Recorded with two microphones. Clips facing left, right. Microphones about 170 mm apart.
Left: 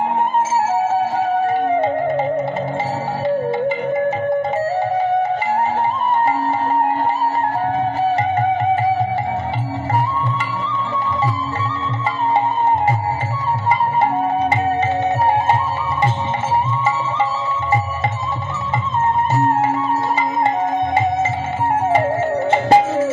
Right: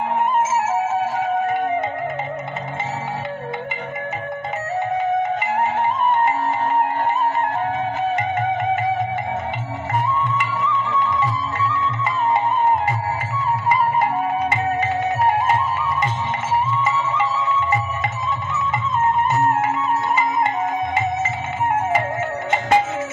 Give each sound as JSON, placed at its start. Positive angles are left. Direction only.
{"t": 22.5, "sound": "music", "side_deg": 30}